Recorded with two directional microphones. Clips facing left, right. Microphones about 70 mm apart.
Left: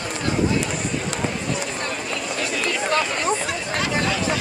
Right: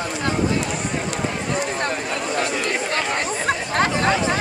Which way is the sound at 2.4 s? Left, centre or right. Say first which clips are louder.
Right 1 dB; right.